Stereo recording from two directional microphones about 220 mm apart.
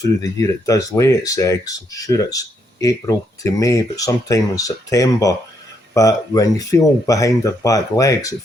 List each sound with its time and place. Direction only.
0.0 s speech: 15° left (ahead or behind)